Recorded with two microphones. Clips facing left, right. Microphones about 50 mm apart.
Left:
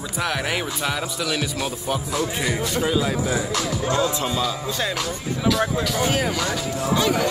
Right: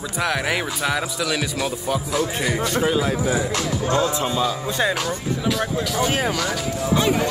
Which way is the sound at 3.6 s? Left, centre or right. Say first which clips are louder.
Right 1 dB; right.